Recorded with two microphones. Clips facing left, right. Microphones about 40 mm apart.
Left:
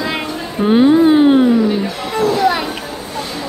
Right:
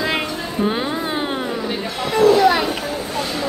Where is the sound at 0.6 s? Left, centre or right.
Centre.